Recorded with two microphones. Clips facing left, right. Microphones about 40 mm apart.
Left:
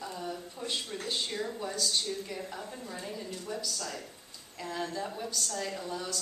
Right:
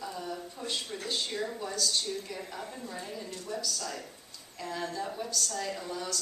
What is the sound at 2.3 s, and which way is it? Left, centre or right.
A woman's voice, centre.